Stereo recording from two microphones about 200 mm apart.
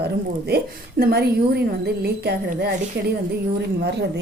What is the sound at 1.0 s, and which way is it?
A woman's voice, 50° right (ahead or behind).